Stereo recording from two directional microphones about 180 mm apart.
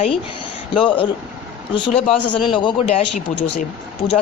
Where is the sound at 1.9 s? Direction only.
35° left (ahead or behind).